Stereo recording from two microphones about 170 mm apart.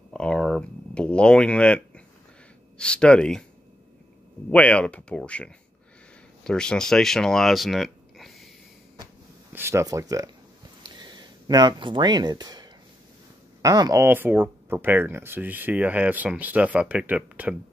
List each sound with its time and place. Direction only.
0.1 s a sound: 5° left (ahead or behind)
2.8 s speech: 5° left (ahead or behind)
4.5 s speech: 10° left (ahead or behind)
9.5 s speech: 15° right (ahead or behind)
10.8 s a sound: 25° right (ahead or behind)
13.6 s speech: 20° right (ahead or behind)